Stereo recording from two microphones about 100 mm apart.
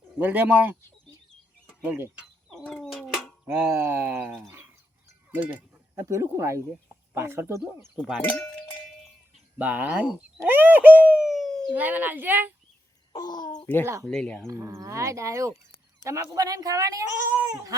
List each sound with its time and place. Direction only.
0.2 s a child's voice: 15° right (ahead or behind)
1.8 s speech: 20° right (ahead or behind)
2.6 s bird: 5° left (ahead or behind)
3.4 s speech: 20° right (ahead or behind)
5.3 s a child's voice: 15° right (ahead or behind)
6.0 s speech: 30° right (ahead or behind)
8.2 s speech: 15° left (ahead or behind)
9.6 s a child's voice: 15° right (ahead or behind)
10.1 s speech: 5° right (ahead or behind)
10.4 s a sound: 20° right (ahead or behind); by 11.7 s 5° left (ahead or behind)
11.7 s a child's voice: 15° right (ahead or behind)
13.1 s speech: 45° left (ahead or behind)
14.0 s speech: 5° left (ahead or behind)
14.4 s speech: 30° right (ahead or behind)